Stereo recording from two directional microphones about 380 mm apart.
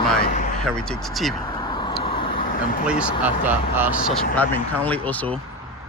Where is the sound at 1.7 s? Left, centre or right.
Centre.